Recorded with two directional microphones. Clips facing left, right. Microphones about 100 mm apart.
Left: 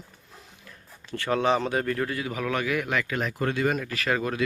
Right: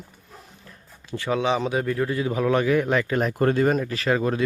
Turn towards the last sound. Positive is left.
turn(degrees=-25)  # may be behind; listen again after turning